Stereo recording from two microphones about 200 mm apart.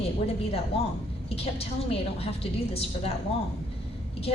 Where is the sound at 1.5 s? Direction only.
30° left (ahead or behind).